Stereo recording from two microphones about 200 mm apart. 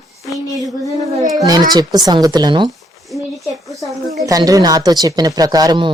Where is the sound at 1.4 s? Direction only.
20° right (ahead or behind).